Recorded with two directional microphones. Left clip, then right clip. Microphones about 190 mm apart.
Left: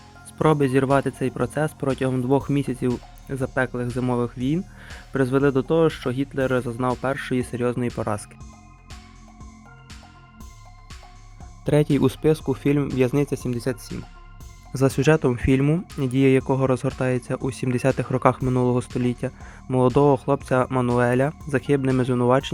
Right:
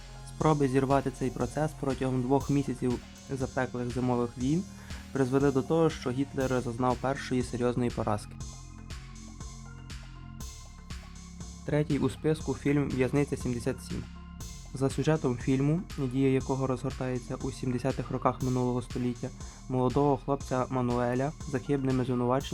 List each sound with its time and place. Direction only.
0.3 s speech: 20° left (ahead or behind)
11.6 s speech: 35° left (ahead or behind); by 22.4 s 20° left (ahead or behind)